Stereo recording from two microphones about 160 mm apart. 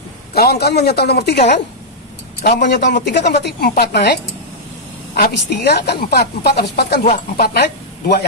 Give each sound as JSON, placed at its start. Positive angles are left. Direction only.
{"t": 0.3, "sound": "a man's voice", "side_deg": 80}
{"t": 2.4, "sound": "a woman's voice", "side_deg": 90}